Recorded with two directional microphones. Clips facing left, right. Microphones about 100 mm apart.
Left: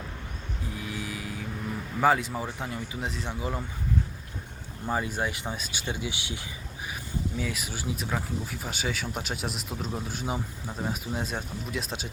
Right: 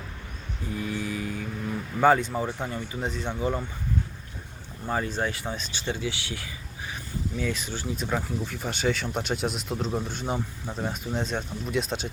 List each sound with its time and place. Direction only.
0.8 s vehicle: 5° left (ahead or behind)
2.0 s speech: 5° left (ahead or behind)
4.9 s speech: 10° left (ahead or behind)
7.3 s speech: 5° left (ahead or behind)